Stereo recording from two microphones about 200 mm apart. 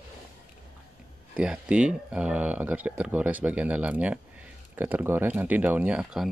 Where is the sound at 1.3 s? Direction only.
5° right (ahead or behind).